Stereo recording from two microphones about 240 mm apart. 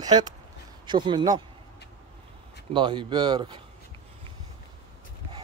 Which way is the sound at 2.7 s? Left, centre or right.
Centre.